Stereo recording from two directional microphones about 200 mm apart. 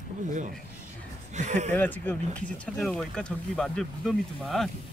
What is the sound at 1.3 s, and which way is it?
Speech, 35° right (ahead or behind).